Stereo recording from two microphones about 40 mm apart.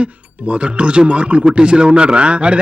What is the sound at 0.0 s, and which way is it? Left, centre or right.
Speech, right.